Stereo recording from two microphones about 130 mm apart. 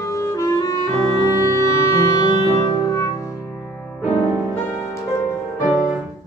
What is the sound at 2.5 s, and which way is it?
Music, 25° left (ahead or behind).